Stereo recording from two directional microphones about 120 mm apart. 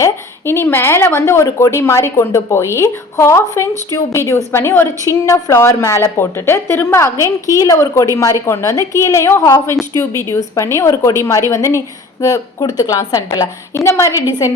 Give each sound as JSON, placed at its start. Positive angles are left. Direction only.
{"t": 0.0, "sound": "a woman's voice", "side_deg": 20}